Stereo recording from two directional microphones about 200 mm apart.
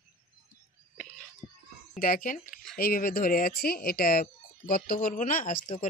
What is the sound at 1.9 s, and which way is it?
Speech, 45° left (ahead or behind).